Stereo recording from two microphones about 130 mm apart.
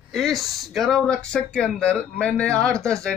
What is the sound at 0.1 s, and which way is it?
Speech, centre (ahead or behind).